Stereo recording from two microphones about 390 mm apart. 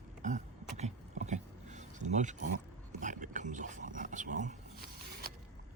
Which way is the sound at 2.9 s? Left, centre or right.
Centre.